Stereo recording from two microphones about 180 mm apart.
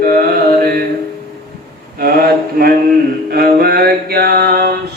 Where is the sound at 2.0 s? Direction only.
55° right (ahead or behind).